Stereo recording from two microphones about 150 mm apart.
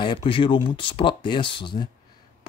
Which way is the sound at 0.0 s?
35° left (ahead or behind).